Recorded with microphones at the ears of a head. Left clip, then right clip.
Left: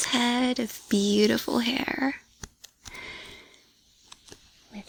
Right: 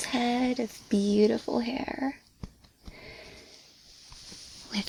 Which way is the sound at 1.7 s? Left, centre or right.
Left.